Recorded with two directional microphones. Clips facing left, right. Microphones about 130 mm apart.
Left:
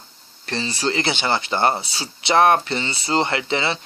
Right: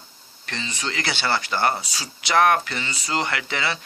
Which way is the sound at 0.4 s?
35° left (ahead or behind).